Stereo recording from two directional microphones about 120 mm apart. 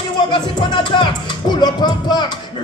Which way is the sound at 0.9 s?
40° left (ahead or behind).